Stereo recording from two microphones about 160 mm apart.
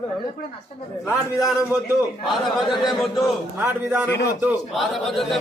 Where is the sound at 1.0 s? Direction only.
20° left (ahead or behind).